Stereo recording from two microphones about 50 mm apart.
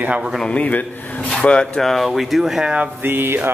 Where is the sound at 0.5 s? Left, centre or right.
Left.